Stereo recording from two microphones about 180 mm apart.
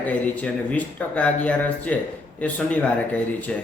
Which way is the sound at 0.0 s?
5° left (ahead or behind).